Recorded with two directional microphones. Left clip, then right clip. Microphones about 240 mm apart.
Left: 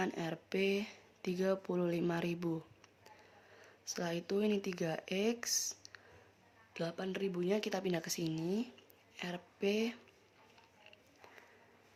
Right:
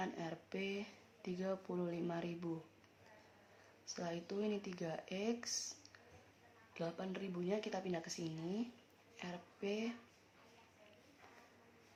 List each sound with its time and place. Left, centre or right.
0.0 s speech: left
3.8 s speech: left